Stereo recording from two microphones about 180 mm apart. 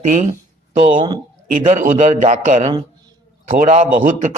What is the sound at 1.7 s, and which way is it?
A man's voice, 45° right (ahead or behind).